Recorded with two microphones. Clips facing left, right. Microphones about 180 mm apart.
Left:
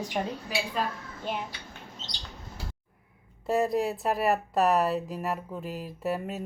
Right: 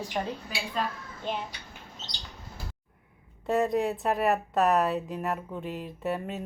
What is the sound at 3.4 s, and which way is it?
A woman's voice, 5° left (ahead or behind).